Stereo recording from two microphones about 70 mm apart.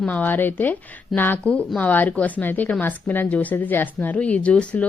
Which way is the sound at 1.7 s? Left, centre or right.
Left.